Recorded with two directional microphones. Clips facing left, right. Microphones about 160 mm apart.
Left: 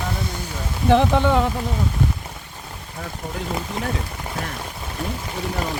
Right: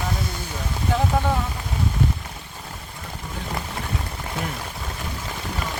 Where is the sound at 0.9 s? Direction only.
75° left (ahead or behind).